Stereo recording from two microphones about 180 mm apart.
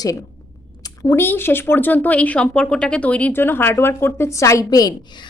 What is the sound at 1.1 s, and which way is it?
A woman's voice, 10° left (ahead or behind).